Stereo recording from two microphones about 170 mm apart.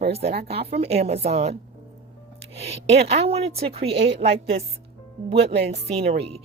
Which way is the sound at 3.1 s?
35° right (ahead or behind).